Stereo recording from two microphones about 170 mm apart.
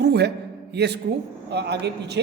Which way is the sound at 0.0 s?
80° right.